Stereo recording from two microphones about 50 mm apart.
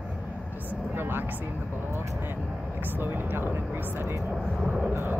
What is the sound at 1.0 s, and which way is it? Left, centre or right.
Speech, right.